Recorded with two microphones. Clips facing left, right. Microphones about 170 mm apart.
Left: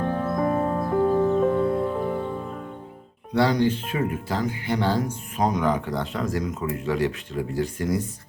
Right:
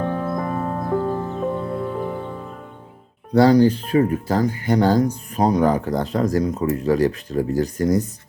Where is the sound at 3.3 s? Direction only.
40° right (ahead or behind).